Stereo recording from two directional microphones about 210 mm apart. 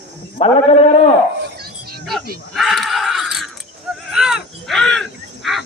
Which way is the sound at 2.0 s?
Centre (ahead or behind).